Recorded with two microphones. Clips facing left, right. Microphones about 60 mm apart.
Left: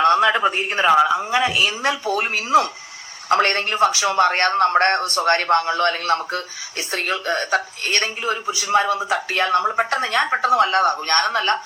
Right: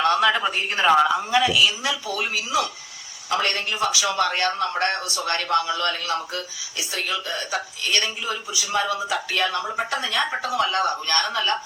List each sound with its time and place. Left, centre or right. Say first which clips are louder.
0.0 s a man's voice: left 4 dB; centre
1.2 s a man's voice: even; left